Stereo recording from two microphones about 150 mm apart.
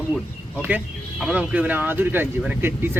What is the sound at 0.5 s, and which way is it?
Speech, 10° right (ahead or behind).